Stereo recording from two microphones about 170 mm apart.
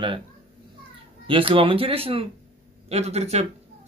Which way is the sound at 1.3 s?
30° right (ahead or behind).